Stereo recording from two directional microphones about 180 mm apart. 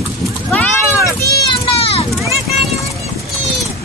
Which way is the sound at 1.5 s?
30° left (ahead or behind).